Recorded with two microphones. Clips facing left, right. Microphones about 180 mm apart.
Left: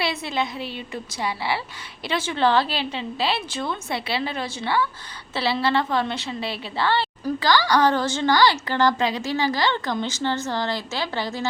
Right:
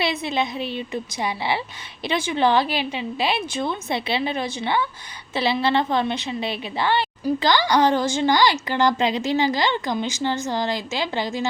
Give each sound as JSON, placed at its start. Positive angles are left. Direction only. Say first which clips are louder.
{"t": 0.0, "sound": "a woman's voice", "louder": "right 2 dB", "side_deg": -20}